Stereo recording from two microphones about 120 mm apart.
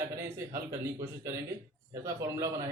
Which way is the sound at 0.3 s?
25° right (ahead or behind).